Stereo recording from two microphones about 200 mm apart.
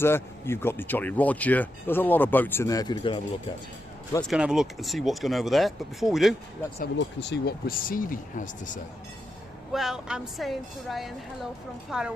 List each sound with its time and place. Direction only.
0.0 s speech: 10° left (ahead or behind)
4.2 s speech: centre (ahead or behind)
6.7 s speech: 55° left (ahead or behind); by 8.8 s 40° left (ahead or behind)
9.7 s speech: centre (ahead or behind)